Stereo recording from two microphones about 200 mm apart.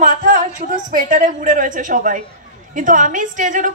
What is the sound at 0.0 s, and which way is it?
A woman's voice, 45° right (ahead or behind).